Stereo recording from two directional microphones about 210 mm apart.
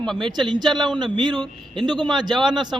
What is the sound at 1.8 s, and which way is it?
Speech, 20° right (ahead or behind).